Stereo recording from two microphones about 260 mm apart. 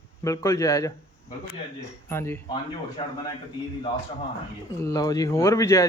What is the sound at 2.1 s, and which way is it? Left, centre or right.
Speech, centre.